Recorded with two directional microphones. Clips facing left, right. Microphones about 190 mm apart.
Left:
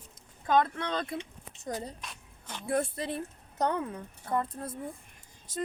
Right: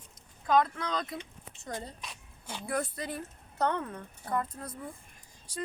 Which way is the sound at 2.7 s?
25° left (ahead or behind).